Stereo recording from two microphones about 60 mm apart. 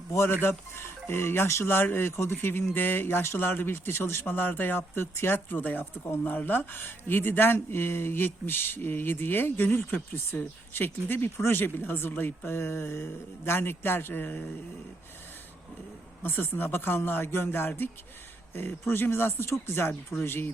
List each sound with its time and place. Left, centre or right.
0.1 s speech: left
16.2 s speech: left